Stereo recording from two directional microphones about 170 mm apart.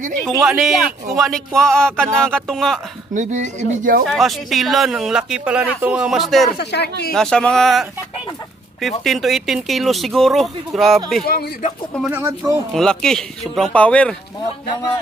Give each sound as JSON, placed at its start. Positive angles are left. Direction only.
{"t": 0.2, "sound": "speech", "side_deg": -15}
{"t": 0.5, "sound": "speech", "side_deg": 0}
{"t": 3.2, "sound": "speech", "side_deg": -45}
{"t": 4.0, "sound": "speech", "side_deg": 0}
{"t": 6.6, "sound": "speech", "side_deg": 75}
{"t": 7.2, "sound": "speech", "side_deg": 5}
{"t": 9.0, "sound": "speech", "side_deg": 0}
{"t": 11.2, "sound": "speech", "side_deg": 60}
{"t": 11.9, "sound": "speech", "side_deg": -5}
{"t": 12.2, "sound": "speech", "side_deg": -20}
{"t": 12.7, "sound": "speech", "side_deg": 5}